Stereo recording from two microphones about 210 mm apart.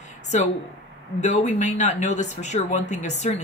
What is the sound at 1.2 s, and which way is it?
Speech, 35° left (ahead or behind).